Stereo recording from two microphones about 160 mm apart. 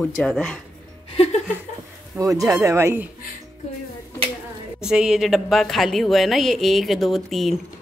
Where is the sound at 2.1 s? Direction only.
20° right (ahead or behind).